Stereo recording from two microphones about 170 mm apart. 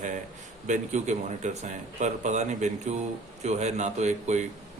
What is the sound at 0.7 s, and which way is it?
A man's voice, 45° right (ahead or behind).